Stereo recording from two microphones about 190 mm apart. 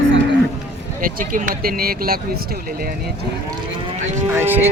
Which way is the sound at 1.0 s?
45° right (ahead or behind).